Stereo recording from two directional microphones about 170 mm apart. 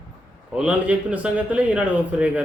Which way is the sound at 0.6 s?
5° right (ahead or behind).